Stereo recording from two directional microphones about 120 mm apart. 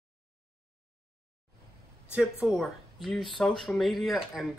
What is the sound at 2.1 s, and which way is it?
Speech, 5° right (ahead or behind).